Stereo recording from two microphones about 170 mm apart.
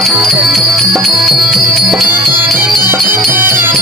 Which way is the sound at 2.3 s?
10° right (ahead or behind).